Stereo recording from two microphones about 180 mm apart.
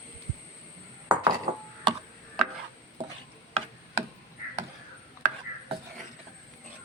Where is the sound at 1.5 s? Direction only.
35° right (ahead or behind).